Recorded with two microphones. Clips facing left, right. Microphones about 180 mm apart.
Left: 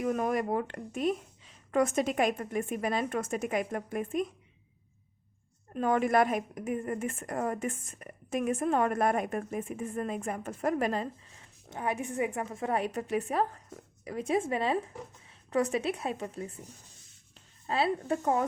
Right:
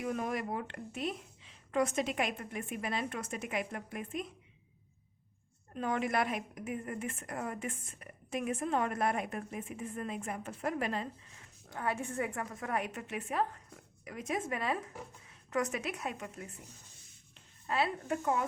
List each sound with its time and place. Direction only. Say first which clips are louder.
0.0 s a woman's voice: left 6 dB; 45° left (ahead or behind)
5.7 s a woman's voice: left 7 dB; 45° left (ahead or behind)
11.7 s a woman's voice: left 3 dB; 20° left (ahead or behind)
17.7 s a woman's voice: left 4 dB; 30° left (ahead or behind)